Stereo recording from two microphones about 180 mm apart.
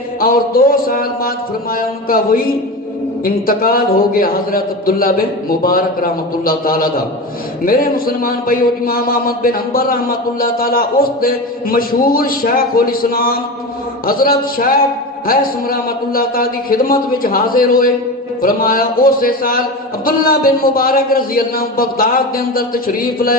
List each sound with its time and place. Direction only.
0.2 s a man's voice: 55° left (ahead or behind)